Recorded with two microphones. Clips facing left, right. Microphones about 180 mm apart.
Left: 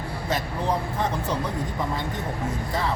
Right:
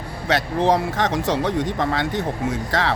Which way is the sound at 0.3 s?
80° right.